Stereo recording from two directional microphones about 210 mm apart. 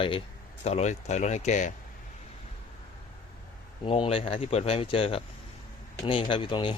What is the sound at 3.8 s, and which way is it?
Speech, 25° left (ahead or behind).